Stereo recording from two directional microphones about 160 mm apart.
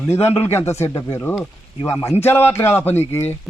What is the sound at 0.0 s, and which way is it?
A man's voice, 15° left (ahead or behind).